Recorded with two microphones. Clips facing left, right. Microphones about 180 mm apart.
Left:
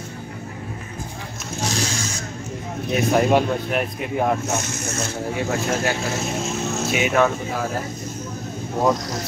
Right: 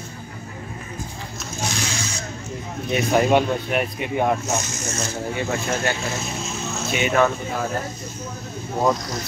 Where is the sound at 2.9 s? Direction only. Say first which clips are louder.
Even; centre (ahead or behind).